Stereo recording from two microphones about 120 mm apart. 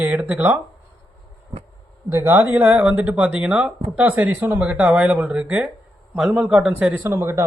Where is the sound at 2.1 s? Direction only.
20° right (ahead or behind).